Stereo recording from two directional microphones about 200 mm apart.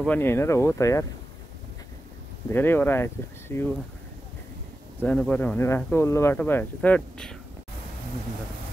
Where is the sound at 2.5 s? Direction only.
10° left (ahead or behind).